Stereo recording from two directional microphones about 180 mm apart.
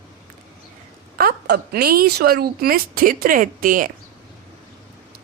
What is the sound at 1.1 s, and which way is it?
Speech, 60° right (ahead or behind).